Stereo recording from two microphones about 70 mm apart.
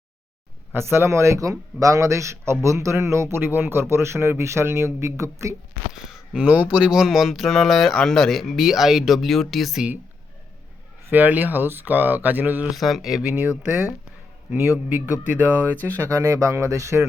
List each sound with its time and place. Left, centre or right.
0.7 s speech: right
5.9 s a sound: centre
6.4 s speech: right; by 9.8 s centre
11.1 s speech: right
12.7 s speech: centre; by 15.9 s right
16.0 s speech: right